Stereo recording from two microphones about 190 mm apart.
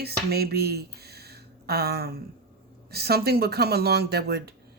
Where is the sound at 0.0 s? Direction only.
55° right (ahead or behind).